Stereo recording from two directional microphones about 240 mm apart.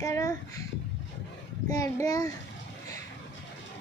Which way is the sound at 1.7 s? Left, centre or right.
Centre.